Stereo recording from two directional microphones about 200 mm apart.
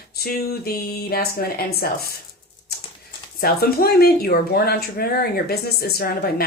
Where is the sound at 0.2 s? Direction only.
50° left (ahead or behind).